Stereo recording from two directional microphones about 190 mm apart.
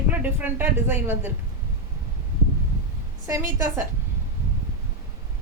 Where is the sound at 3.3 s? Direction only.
15° right (ahead or behind).